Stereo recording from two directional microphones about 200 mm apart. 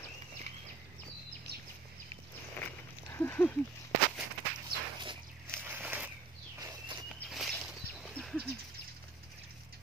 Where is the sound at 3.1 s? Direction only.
10° left (ahead or behind).